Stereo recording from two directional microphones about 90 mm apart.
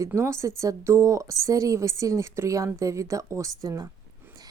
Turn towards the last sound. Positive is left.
turn(degrees=-40)  # may be behind; listen again after turning